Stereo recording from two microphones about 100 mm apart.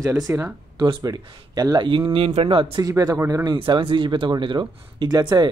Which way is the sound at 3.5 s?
60° right (ahead or behind).